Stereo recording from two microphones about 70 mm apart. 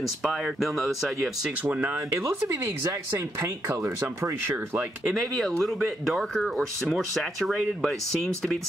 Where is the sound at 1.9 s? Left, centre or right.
Right.